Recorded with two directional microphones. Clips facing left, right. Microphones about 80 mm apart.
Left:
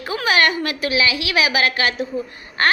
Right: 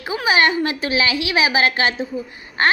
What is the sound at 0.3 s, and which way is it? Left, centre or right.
A woman's voice, right.